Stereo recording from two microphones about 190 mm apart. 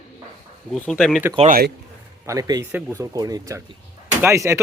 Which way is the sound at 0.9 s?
5° right (ahead or behind).